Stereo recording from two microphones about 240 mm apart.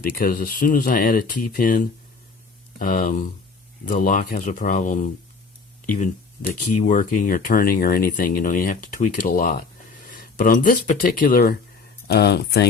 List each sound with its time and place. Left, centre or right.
0.2 s speech: left